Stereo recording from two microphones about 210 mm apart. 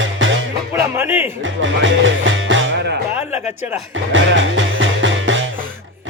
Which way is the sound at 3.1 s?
10° right (ahead or behind).